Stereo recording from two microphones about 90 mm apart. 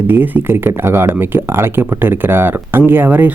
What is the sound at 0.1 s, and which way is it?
Speech, 20° right (ahead or behind).